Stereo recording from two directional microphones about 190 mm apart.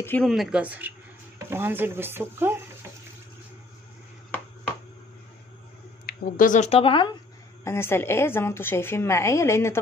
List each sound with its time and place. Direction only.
0.0 s a woman's voice: 10° left (ahead or behind)
0.3 s speech: 5° right (ahead or behind)
6.0 s speech: 45° left (ahead or behind); by 7.2 s 25° left (ahead or behind)
7.6 s a woman's voice: 15° left (ahead or behind)